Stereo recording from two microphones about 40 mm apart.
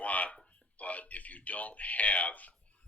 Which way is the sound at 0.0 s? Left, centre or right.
Left.